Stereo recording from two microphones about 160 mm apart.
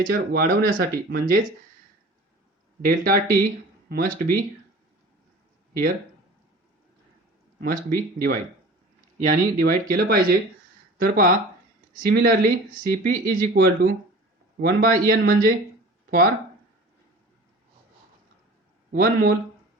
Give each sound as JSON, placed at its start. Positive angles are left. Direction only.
{"t": 0.0, "sound": "speech", "side_deg": -70}
{"t": 2.8, "sound": "speech", "side_deg": -60}
{"t": 7.6, "sound": "speech", "side_deg": -65}
{"t": 18.9, "sound": "speech", "side_deg": -70}